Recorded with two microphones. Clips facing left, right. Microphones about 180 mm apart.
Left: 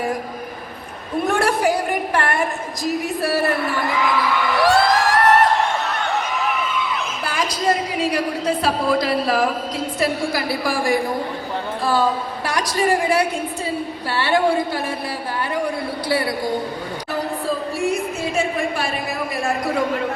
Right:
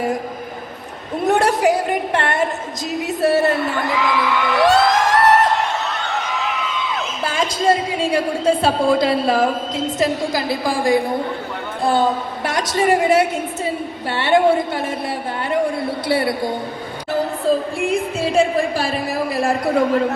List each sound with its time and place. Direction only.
1.2 s a woman's voice: 20° right (ahead or behind)
7.3 s speech: 25° right (ahead or behind)
16.0 s speech: 25° right (ahead or behind)
18.2 s a woman's voice: 30° right (ahead or behind)